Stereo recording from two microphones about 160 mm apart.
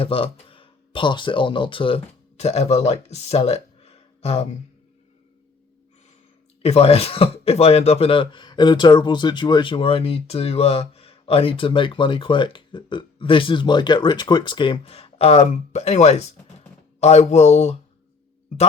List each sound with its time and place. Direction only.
0.0 s speech: 35° left (ahead or behind)
6.6 s speech: 40° left (ahead or behind)